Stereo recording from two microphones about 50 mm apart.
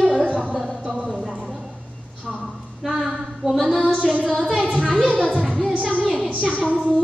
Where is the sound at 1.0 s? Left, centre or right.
Centre.